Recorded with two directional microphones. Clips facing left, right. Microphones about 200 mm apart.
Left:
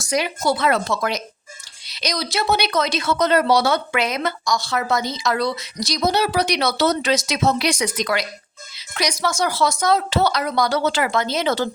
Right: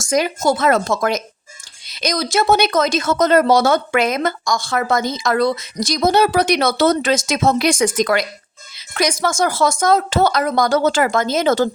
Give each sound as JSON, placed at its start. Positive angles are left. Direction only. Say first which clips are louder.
{"t": 0.0, "sound": "speech", "louder": "right 4 dB", "side_deg": -45}